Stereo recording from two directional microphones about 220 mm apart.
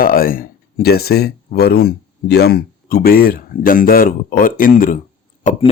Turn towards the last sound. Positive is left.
turn(degrees=30)  # may be behind; listen again after turning